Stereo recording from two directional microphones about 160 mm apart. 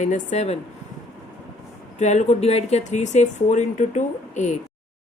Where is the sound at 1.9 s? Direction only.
45° left (ahead or behind).